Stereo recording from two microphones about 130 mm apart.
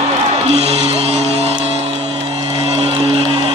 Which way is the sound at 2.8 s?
50° right (ahead or behind).